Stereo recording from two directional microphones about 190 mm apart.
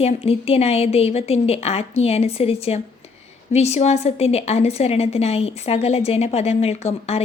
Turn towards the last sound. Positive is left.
turn(degrees=35)  # may be behind; listen again after turning